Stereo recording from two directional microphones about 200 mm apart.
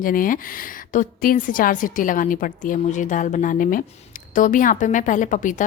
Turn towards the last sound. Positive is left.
turn(degrees=40)  # may be behind; listen again after turning